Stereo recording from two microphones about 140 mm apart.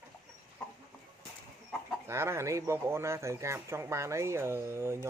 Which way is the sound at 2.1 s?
20° right (ahead or behind).